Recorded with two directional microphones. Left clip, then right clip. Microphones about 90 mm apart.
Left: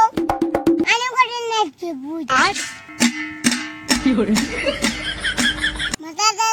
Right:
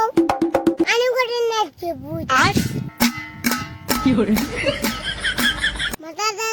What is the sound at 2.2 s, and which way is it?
Music, centre (ahead or behind).